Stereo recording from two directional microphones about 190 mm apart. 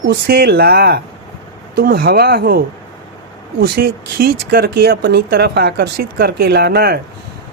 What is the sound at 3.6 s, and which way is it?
Speech, 50° right (ahead or behind).